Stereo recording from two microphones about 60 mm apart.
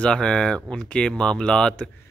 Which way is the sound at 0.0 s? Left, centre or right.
Centre.